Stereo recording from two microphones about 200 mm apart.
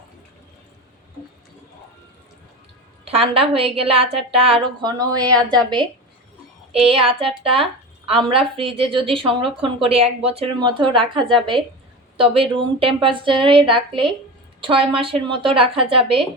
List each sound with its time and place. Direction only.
3.0 s a woman's voice: 30° right (ahead or behind)